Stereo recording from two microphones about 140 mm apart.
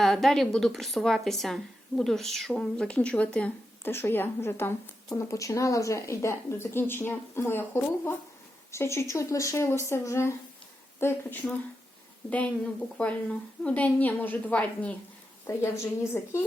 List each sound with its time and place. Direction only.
0.0 s a woman's voice: centre (ahead or behind)
13.0 s a woman's voice: 10° left (ahead or behind)